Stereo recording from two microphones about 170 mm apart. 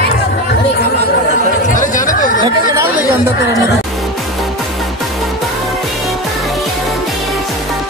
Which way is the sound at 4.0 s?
Centre (ahead or behind).